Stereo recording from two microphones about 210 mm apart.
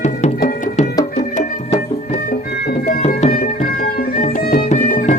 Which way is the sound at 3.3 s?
45° left (ahead or behind).